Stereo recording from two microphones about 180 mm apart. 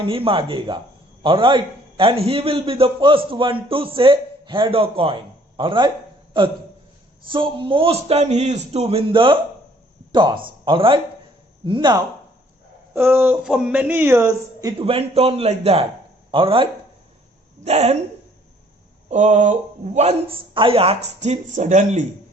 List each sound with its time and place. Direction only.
0.0 s a man's voice: 30° right (ahead or behind)
7.3 s a man's voice: 25° right (ahead or behind)
12.9 s speech: 10° right (ahead or behind)
14.8 s a man's voice: 30° right (ahead or behind)
19.0 s speech: 40° right (ahead or behind)